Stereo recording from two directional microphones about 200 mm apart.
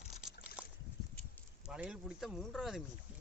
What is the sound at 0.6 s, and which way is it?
Boat, 5° right (ahead or behind).